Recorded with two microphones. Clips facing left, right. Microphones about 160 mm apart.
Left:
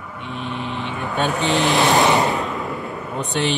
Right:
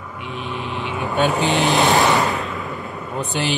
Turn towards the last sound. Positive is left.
turn(degrees=0)  # may be behind; listen again after turning